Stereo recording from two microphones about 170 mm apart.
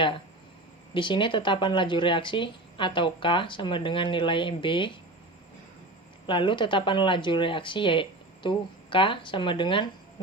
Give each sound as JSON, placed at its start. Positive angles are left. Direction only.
{"t": 0.9, "sound": "speech", "side_deg": 30}
{"t": 6.2, "sound": "speech", "side_deg": 30}